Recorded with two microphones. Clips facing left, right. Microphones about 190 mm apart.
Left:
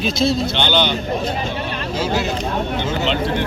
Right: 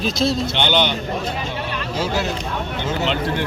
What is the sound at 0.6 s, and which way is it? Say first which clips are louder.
Speech: right 1 dB; 15° right (ahead or behind).